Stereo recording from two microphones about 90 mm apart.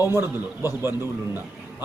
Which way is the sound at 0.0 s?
25° right (ahead or behind).